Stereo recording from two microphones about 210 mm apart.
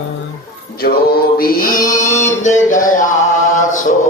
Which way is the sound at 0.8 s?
45° left (ahead or behind).